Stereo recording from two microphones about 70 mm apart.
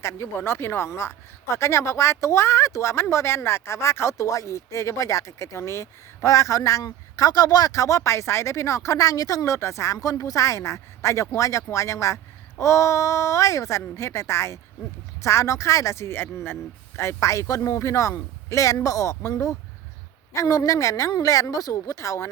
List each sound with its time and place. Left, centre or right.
0.0 s speech: left
7.2 s speech: left
20.3 s speech: left